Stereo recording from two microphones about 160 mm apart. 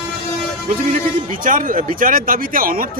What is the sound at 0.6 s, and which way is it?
Speech, 60° right (ahead or behind).